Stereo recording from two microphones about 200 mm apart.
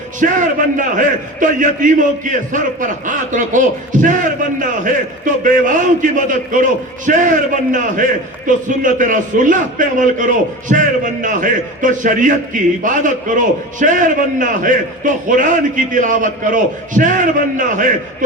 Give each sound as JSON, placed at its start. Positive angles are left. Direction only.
{"t": 0.2, "sound": "a man's voice", "side_deg": -40}